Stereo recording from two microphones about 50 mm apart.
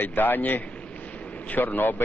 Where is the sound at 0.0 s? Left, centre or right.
Left.